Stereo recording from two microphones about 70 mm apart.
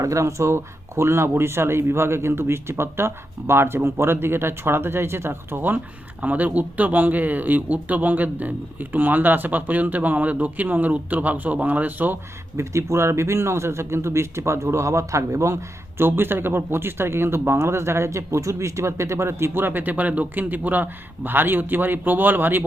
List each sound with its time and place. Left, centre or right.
0.0 s speech: right
12.5 s speech: right
16.0 s speech: right